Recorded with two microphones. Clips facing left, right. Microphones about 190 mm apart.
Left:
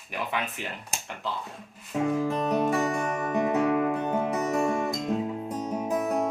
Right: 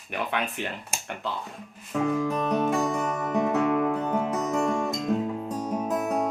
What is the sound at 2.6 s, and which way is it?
Music, 15° left (ahead or behind).